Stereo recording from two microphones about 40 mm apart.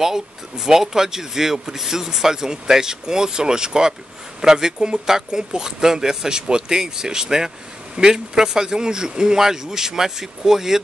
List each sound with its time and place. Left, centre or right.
0.0 s speech: centre